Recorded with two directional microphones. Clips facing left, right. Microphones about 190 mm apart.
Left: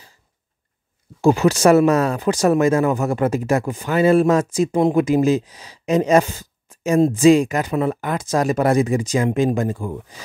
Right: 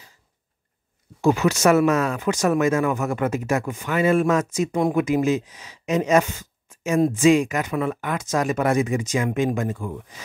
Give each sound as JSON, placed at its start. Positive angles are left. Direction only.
{"t": 1.2, "sound": "speech", "side_deg": 30}